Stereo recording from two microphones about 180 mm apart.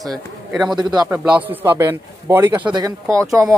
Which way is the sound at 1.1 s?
10° right (ahead or behind).